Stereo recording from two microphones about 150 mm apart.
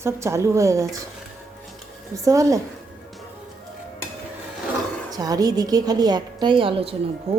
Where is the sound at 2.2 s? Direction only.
20° right (ahead or behind).